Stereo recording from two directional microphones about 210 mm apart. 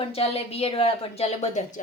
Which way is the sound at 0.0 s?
30° left (ahead or behind).